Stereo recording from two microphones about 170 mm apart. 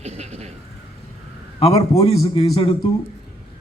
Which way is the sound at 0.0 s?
40° right (ahead or behind).